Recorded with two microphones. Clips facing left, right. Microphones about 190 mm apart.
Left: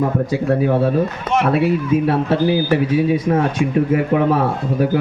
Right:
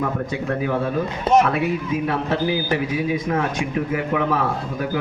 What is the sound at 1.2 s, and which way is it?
Speech, 40° right (ahead or behind).